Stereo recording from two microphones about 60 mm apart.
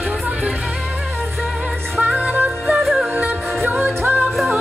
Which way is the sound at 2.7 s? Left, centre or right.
Centre.